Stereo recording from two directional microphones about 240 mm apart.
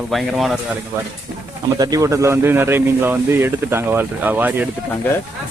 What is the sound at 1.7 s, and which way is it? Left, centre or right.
Speech, centre.